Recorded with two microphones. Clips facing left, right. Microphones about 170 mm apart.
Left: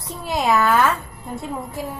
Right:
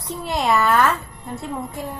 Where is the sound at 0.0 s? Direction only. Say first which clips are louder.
Even; centre (ahead or behind).